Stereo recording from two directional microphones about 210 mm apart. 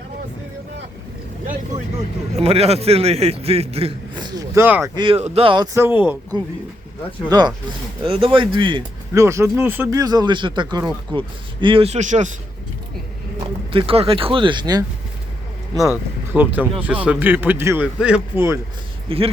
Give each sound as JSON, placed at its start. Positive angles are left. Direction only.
{"t": 2.0, "sound": "speech", "side_deg": -30}
{"t": 4.9, "sound": "speech", "side_deg": -25}
{"t": 7.3, "sound": "speech", "side_deg": -20}
{"t": 13.7, "sound": "speech", "side_deg": -25}
{"t": 16.3, "sound": "a man's voice", "side_deg": -10}
{"t": 19.0, "sound": "speech", "side_deg": -25}